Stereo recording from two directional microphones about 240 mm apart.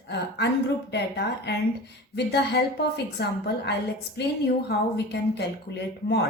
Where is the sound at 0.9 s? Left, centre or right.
Left.